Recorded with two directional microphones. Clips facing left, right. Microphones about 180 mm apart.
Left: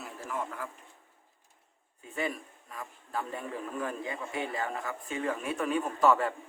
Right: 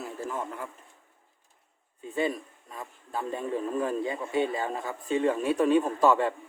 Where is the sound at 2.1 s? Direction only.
25° right (ahead or behind).